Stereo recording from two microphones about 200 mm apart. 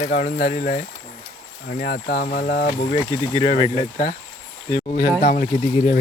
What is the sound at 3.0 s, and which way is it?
Speech, 25° left (ahead or behind).